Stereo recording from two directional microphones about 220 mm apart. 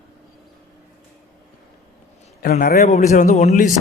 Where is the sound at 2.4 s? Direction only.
40° left (ahead or behind).